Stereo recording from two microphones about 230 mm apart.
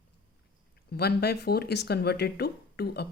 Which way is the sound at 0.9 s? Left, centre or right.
Left.